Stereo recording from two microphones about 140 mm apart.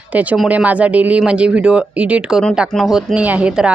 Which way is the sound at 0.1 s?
10° right (ahead or behind).